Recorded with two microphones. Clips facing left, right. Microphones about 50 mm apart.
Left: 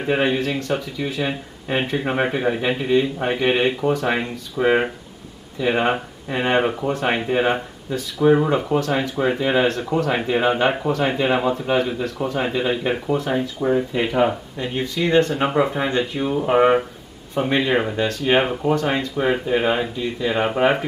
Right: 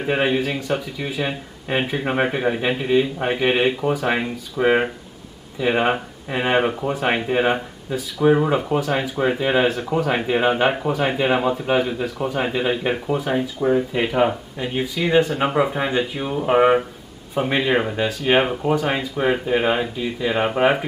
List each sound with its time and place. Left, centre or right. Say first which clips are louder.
0.0 s speech: even; centre